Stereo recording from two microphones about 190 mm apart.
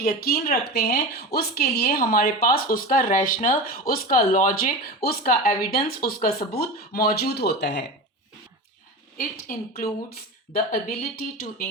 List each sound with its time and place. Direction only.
0.0 s a woman's voice: 55° left (ahead or behind)
9.7 s a woman's voice: 50° left (ahead or behind)